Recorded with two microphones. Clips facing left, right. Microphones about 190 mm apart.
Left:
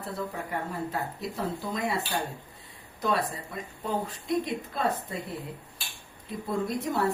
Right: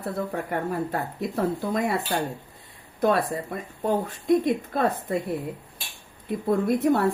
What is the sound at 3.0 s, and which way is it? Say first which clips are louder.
Speech: right 6 dB; 55° right (ahead or behind).